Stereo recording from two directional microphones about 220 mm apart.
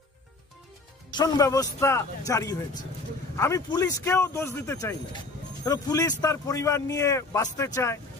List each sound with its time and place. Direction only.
1.1 s speech: 15° left (ahead or behind)